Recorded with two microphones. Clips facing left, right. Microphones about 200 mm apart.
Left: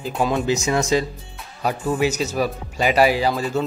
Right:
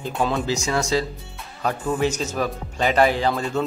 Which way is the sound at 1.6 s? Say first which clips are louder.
Left 1 dB; 10° left (ahead or behind).